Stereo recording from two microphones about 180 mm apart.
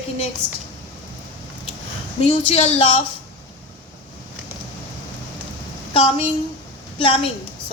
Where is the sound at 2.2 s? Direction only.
35° left (ahead or behind).